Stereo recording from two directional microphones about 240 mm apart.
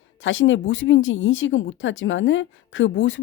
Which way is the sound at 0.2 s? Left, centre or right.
Left.